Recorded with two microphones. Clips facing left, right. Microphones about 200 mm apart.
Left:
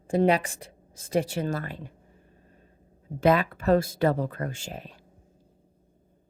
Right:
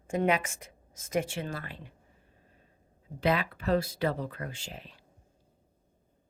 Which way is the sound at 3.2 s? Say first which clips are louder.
Left 6 dB; 45° left (ahead or behind).